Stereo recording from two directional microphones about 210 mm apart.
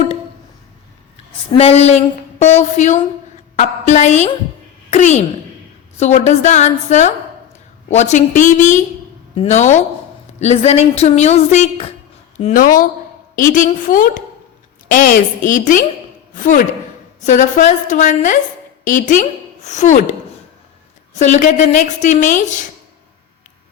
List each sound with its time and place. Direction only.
1.5 s a woman's voice: 30° left (ahead or behind)
21.2 s a woman's voice: 35° left (ahead or behind)